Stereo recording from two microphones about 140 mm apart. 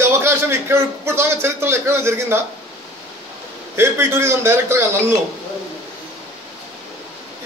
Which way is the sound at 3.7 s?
15° right (ahead or behind).